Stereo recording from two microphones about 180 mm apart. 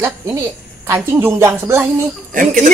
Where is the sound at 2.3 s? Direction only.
50° right (ahead or behind).